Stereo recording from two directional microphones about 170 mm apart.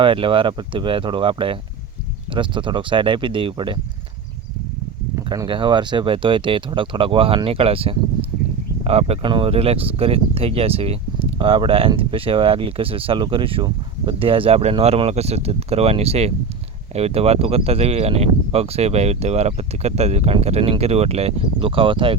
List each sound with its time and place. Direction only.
0.0 s speech: 30° right (ahead or behind)
5.1 s speech: 20° right (ahead or behind)